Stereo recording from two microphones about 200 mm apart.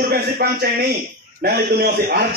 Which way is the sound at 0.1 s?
50° right (ahead or behind).